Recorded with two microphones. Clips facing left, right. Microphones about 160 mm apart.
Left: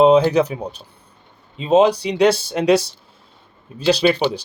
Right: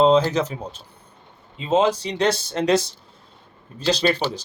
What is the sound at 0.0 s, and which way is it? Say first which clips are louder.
Speech: left 4 dB; 15° left (ahead or behind).